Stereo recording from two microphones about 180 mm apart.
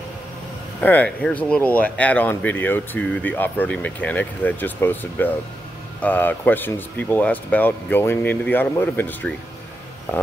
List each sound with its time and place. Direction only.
0.7 s speech: 5° left (ahead or behind)